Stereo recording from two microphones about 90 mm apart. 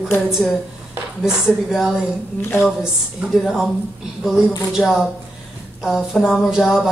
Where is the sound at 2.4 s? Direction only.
25° left (ahead or behind).